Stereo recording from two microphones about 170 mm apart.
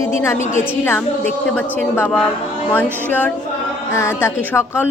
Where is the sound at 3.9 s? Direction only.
15° left (ahead or behind).